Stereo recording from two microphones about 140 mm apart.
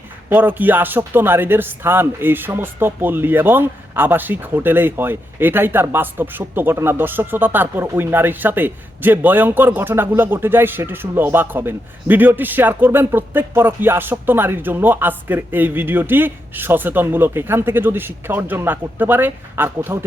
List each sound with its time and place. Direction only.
0.3 s speech: 15° right (ahead or behind)